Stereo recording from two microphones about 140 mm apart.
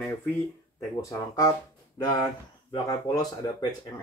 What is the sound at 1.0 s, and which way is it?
Speech, 25° left (ahead or behind).